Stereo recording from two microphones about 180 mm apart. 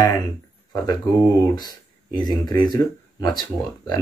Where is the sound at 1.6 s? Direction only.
20° left (ahead or behind).